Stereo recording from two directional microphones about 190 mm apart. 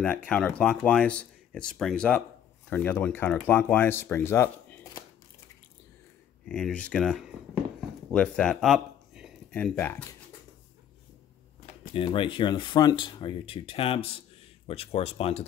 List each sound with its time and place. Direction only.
0.3 s speech: 5° left (ahead or behind)
6.4 s speech: 5° left (ahead or behind)
9.5 s speech: 10° left (ahead or behind)
11.6 s speech: 30° left (ahead or behind)